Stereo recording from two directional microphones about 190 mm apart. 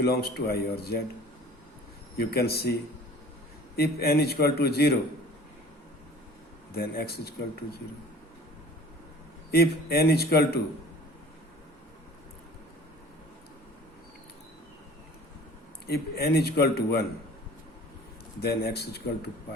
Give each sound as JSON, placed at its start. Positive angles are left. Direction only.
{"t": 0.0, "sound": "a man's voice", "side_deg": 55}
{"t": 2.1, "sound": "a man's voice", "side_deg": 55}
{"t": 3.8, "sound": "a man's voice", "side_deg": 55}
{"t": 6.7, "sound": "a man's voice", "side_deg": 55}
{"t": 9.5, "sound": "a man's voice", "side_deg": 55}
{"t": 15.9, "sound": "a man's voice", "side_deg": 55}
{"t": 18.3, "sound": "a man's voice", "side_deg": 55}